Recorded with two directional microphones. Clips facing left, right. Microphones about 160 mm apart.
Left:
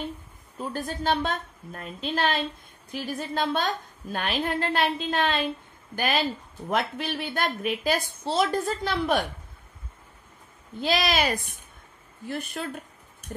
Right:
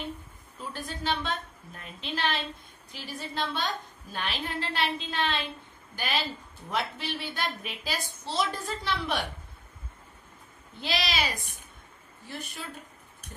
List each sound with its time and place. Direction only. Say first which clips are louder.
0.6 s a woman's voice: left 6 dB; 50° left (ahead or behind)
10.8 s a woman's voice: left 6 dB; 50° left (ahead or behind)